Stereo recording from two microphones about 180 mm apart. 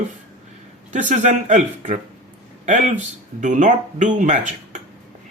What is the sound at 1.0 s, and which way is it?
Speech, 40° right (ahead or behind).